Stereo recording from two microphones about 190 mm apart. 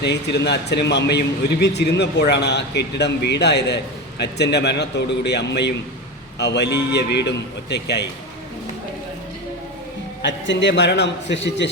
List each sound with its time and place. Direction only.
0.0 s speech: 65° left (ahead or behind)
10.2 s a man's voice: 70° left (ahead or behind)